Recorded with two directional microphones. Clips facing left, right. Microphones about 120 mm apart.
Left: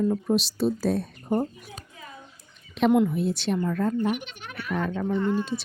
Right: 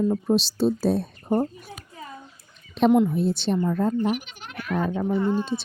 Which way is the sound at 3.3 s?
Centre (ahead or behind).